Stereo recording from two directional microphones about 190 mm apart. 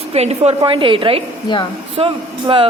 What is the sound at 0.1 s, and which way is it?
Speech, 35° right (ahead or behind).